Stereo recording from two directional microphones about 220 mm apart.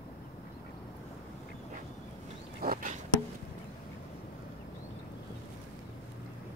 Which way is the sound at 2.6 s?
40° right (ahead or behind).